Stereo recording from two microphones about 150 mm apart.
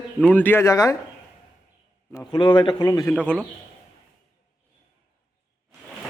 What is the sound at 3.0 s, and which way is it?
Speech, 10° left (ahead or behind).